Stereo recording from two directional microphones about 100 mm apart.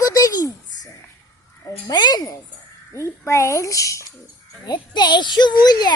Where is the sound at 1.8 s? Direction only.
45° left (ahead or behind).